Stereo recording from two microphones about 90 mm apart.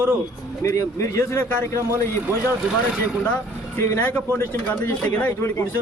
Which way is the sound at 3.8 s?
30° left (ahead or behind).